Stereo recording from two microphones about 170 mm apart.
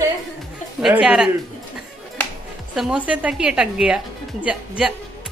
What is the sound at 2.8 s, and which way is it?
Speech, 5° right (ahead or behind).